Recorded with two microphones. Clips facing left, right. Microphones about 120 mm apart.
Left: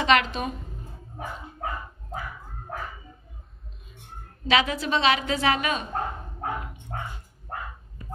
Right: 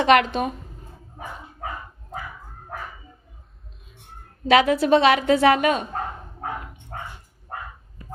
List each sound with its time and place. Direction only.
0.0 s a woman's voice: 55° right (ahead or behind)
4.5 s a woman's voice: 55° right (ahead or behind)